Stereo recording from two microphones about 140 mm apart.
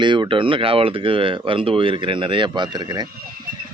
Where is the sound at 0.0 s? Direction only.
35° right (ahead or behind).